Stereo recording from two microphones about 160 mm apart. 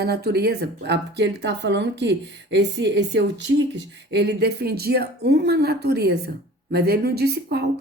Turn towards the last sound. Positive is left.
turn(degrees=-90)